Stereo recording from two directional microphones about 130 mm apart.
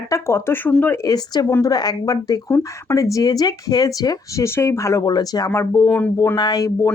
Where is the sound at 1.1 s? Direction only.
30° left (ahead or behind).